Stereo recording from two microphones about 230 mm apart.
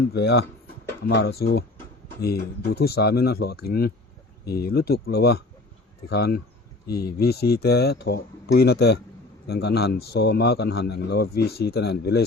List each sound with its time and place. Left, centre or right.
0.1 s a man's voice: left